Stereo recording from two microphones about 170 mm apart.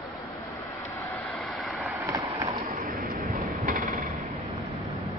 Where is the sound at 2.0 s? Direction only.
20° right (ahead or behind).